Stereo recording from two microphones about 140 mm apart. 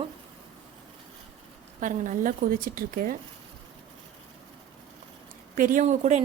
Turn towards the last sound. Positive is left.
turn(degrees=-55)  # may be behind; listen again after turning